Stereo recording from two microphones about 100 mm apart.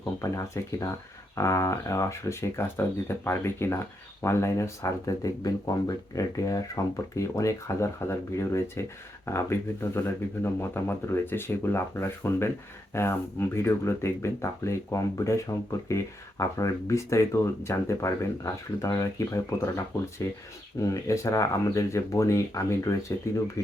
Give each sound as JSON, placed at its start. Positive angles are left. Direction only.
{"t": 0.2, "sound": "speech", "side_deg": 30}